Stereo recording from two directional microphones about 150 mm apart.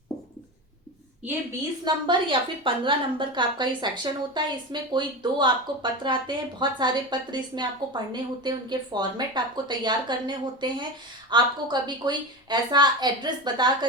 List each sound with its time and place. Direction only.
1.2 s a woman's voice: 10° right (ahead or behind)
1.8 s a woman's voice: 35° right (ahead or behind)